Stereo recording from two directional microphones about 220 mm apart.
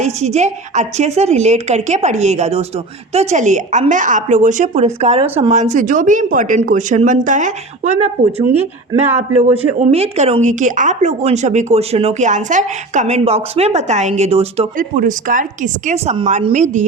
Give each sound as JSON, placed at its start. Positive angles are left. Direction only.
{"t": 0.0, "sound": "a woman's voice", "side_deg": -30}